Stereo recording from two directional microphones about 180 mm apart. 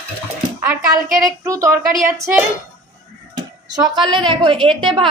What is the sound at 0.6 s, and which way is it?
A woman's voice, 20° right (ahead or behind).